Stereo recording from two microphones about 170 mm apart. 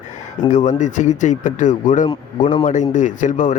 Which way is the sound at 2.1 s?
30° left (ahead or behind).